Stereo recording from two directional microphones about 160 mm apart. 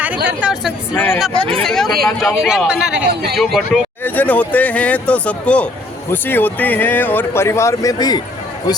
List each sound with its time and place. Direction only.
0.3 s speech: 5° right (ahead or behind)
0.9 s speech: 15° left (ahead or behind)
1.3 s speech: 35° right (ahead or behind)
1.6 s a man's voice: centre (ahead or behind)
4.0 s speech: 10° left (ahead or behind)